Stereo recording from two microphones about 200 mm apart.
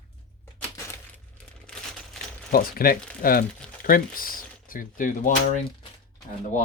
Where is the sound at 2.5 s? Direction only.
45° left (ahead or behind).